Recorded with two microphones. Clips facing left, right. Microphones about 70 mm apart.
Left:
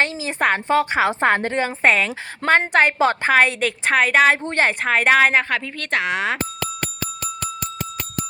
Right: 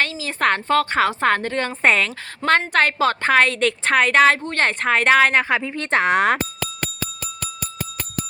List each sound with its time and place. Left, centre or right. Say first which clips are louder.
0.0 s a woman's voice: left 1 dB; left
1.8 s speech: even; centre
2.4 s a woman's voice: left 1 dB; left
2.7 s a woman's voice: left 2 dB; centre
5.5 s a woman's voice: right 3 dB; centre
6.0 s speech: right 6 dB; right